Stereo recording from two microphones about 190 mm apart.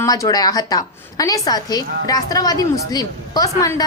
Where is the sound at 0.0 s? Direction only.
20° left (ahead or behind).